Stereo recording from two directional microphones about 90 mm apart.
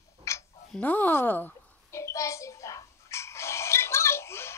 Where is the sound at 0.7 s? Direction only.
20° left (ahead or behind).